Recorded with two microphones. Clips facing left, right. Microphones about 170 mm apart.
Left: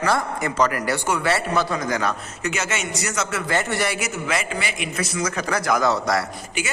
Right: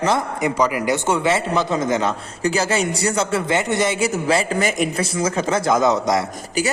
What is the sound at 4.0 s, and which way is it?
A man's voice, 30° right (ahead or behind).